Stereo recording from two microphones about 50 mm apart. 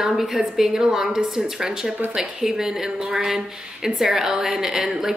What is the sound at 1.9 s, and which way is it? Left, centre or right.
Speech, right.